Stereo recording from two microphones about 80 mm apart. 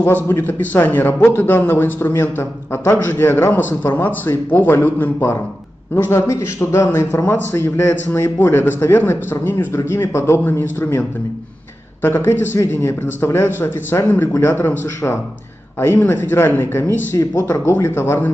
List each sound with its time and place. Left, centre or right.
0.0 s a man's voice: left
17.2 s speech: left
17.5 s a man's voice: left